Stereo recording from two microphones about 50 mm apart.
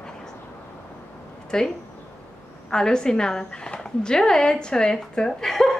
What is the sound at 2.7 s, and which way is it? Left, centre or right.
Speech, centre.